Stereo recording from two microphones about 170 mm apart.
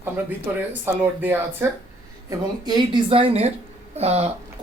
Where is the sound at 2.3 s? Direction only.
25° right (ahead or behind).